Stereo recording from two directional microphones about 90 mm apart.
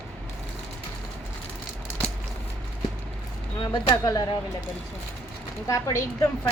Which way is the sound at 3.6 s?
55° left (ahead or behind).